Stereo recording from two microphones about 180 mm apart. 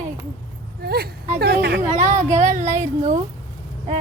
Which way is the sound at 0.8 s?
60° right (ahead or behind).